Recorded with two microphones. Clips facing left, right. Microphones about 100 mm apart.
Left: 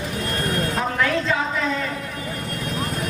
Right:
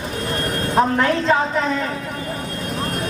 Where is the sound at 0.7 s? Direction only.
40° right (ahead or behind).